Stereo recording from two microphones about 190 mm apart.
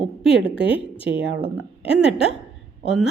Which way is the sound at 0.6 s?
30° left (ahead or behind).